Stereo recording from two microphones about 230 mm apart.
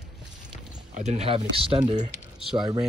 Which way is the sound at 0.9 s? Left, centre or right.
Right.